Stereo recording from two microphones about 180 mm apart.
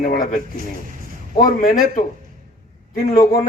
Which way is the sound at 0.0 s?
50° left (ahead or behind).